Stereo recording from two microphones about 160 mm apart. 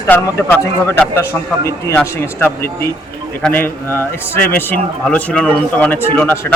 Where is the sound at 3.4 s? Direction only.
15° left (ahead or behind).